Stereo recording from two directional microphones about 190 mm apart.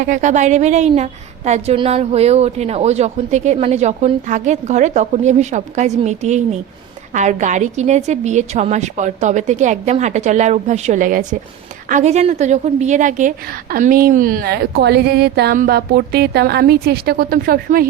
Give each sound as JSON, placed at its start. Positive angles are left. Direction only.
{"t": 0.0, "sound": "a woman's voice", "side_deg": -40}